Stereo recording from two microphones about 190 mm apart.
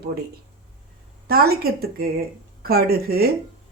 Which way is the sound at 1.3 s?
55° right (ahead or behind).